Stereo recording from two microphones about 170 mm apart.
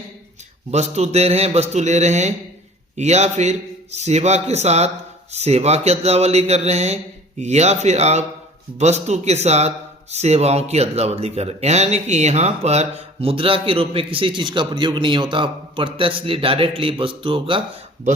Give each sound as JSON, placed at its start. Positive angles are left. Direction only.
{"t": 0.7, "sound": "a man's voice", "side_deg": -40}